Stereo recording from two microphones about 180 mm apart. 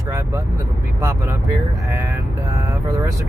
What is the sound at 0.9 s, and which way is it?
Speech, 15° right (ahead or behind).